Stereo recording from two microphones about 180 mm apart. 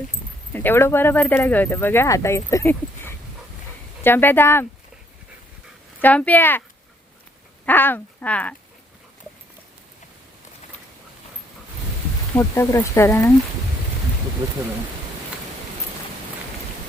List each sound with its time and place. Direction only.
0.5 s speech: 10° left (ahead or behind)
6.0 s speech: 10° left (ahead or behind)
7.6 s speech: 10° left (ahead or behind)
12.4 s speech: 15° left (ahead or behind)